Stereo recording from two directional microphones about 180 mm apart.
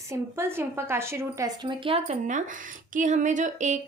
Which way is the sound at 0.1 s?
15° right (ahead or behind).